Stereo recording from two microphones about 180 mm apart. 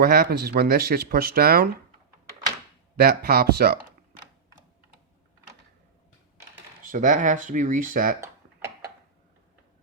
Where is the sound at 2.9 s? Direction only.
60° right (ahead or behind).